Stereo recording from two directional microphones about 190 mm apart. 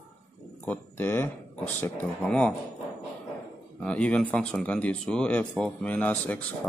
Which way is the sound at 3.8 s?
5° left (ahead or behind).